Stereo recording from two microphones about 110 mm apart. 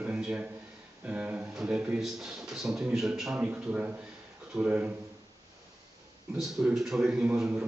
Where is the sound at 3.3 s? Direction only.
15° right (ahead or behind).